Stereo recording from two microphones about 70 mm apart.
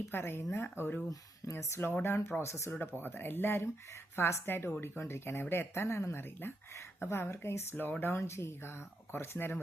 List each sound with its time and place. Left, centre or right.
0.1 s a woman's voice: left